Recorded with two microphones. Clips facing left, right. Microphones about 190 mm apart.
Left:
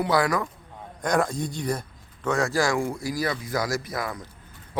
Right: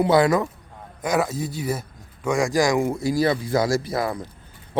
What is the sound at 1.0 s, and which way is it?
A man's voice, 5° right (ahead or behind).